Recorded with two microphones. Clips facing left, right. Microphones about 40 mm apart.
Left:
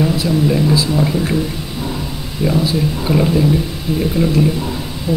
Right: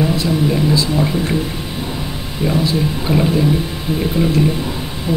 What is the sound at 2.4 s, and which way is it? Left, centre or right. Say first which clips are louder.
Speech: left 1 dB; centre.